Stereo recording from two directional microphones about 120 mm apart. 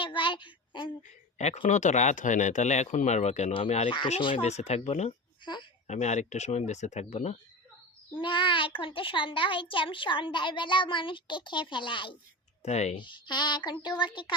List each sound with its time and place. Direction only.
0.0 s a sound: 45° left (ahead or behind)
1.0 s a woman's voice: 70° left (ahead or behind)
1.6 s speech: 90° left; by 3.5 s 70° left (ahead or behind)
3.5 s speech: 55° left (ahead or behind)
3.8 s a child's voice: 45° left (ahead or behind)
4.4 s speech: 70° left (ahead or behind)
8.2 s a child's voice: 40° left (ahead or behind)
12.6 s speech: 65° left (ahead or behind)
13.0 s speech: 40° left (ahead or behind)